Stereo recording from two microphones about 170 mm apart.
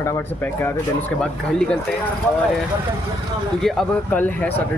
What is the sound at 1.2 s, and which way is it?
Speech, 5° left (ahead or behind).